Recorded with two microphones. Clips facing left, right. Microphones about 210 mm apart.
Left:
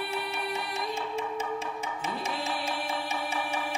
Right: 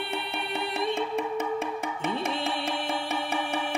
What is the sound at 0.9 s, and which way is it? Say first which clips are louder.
Music: right 4 dB; 60° right (ahead or behind).